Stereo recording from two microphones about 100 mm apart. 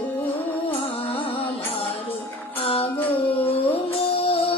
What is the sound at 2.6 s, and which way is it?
Music, 70° left (ahead or behind).